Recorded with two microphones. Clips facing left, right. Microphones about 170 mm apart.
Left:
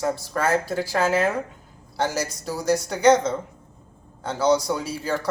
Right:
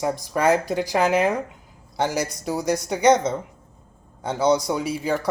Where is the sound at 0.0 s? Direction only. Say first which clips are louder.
Right 3 dB; 15° right (ahead or behind).